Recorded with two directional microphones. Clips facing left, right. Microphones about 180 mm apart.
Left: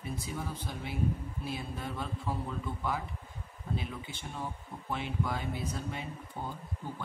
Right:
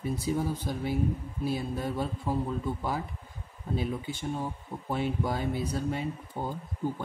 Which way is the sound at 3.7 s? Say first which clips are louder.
Right 7 dB; 40° right (ahead or behind).